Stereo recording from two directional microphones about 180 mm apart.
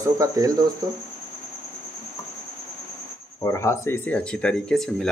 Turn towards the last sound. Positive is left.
turn(degrees=5)  # may be behind; listen again after turning